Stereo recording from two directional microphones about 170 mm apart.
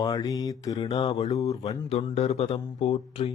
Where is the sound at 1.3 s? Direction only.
20° left (ahead or behind).